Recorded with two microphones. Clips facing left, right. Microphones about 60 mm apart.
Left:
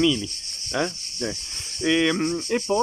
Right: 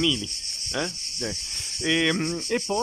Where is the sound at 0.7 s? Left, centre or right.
Left.